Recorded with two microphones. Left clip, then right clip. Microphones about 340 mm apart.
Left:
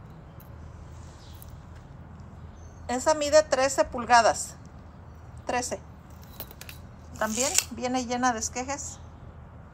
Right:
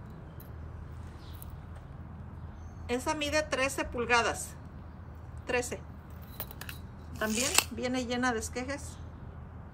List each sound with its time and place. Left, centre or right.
2.9 s a woman's voice: centre
5.5 s a woman's voice: centre
7.3 s speech: right
7.7 s a woman's voice: centre